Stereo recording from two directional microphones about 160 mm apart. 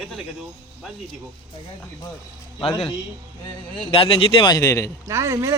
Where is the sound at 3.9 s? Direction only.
35° left (ahead or behind); by 4.9 s 20° left (ahead or behind).